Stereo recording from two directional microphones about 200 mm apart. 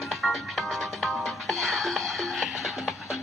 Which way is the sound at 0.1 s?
Centre (ahead or behind).